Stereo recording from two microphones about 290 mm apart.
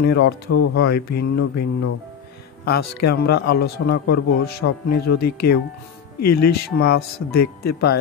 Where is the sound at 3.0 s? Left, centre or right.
Left.